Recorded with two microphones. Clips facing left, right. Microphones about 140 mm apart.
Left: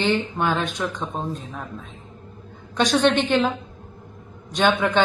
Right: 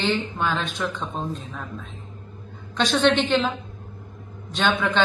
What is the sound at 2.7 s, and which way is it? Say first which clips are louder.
Speech: left 1 dB; 10° left (ahead or behind).